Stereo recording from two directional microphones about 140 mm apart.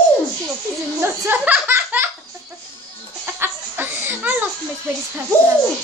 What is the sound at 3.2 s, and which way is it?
Laughter, 15° right (ahead or behind).